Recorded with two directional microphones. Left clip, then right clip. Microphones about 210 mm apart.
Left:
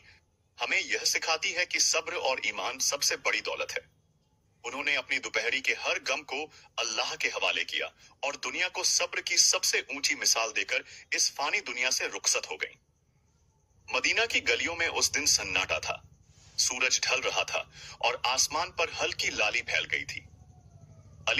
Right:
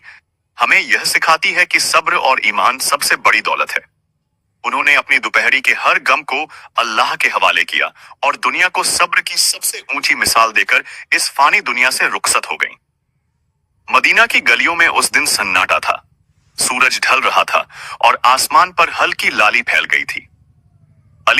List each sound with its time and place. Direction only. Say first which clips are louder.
0.0 s speech: right 19 dB; 45° right (ahead or behind)
13.8 s speech: right 17 dB; 45° right (ahead or behind)